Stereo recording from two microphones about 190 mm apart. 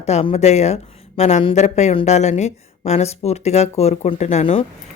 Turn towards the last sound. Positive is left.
turn(degrees=30)  # may be behind; listen again after turning